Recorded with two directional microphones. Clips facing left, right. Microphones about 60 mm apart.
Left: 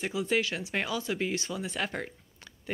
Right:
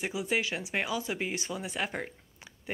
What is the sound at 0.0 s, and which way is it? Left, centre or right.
Speech, centre.